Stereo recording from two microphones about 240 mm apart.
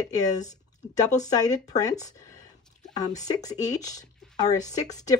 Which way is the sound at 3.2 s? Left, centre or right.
Centre.